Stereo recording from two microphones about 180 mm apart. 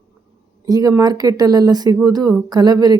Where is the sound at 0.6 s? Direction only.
20° right (ahead or behind).